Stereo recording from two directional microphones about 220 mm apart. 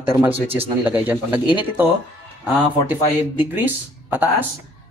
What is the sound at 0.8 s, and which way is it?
A man's voice, 10° right (ahead or behind).